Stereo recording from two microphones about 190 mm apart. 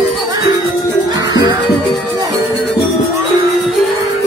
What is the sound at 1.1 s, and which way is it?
Music, 20° right (ahead or behind).